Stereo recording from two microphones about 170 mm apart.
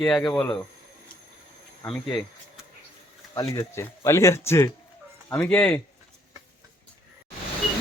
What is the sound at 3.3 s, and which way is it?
Speech, 20° left (ahead or behind).